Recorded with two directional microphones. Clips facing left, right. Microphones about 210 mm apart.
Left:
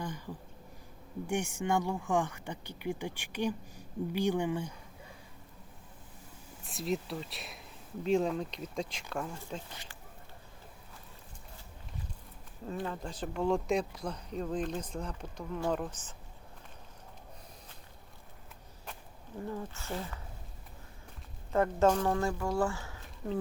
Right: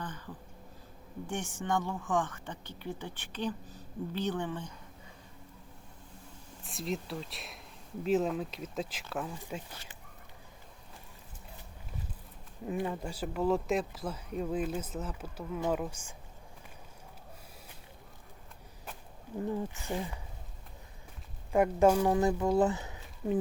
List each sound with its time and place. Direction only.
0.0 s speech: 10° left (ahead or behind)
1.3 s speech: 10° left (ahead or behind)
6.7 s speech: centre (ahead or behind)
12.6 s speech: 15° right (ahead or behind)
19.5 s speech: 15° right (ahead or behind)
21.5 s speech: 15° right (ahead or behind)